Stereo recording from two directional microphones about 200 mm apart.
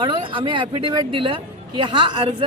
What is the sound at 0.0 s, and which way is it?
A man's voice, 25° right (ahead or behind).